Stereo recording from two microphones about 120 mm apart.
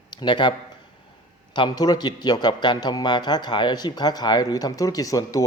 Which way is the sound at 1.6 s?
35° left (ahead or behind).